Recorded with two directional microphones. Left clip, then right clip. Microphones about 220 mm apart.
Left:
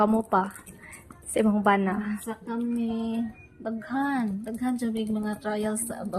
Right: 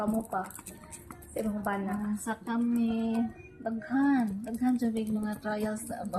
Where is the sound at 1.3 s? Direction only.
55° left (ahead or behind).